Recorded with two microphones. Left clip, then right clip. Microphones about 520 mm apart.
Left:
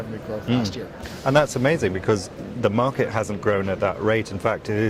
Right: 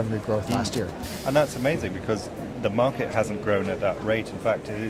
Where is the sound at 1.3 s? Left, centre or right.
Left.